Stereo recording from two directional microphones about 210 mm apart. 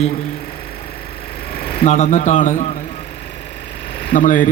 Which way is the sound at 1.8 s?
35° left (ahead or behind).